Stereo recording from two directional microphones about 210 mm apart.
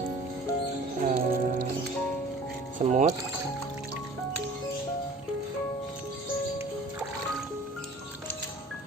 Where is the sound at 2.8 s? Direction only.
35° right (ahead or behind).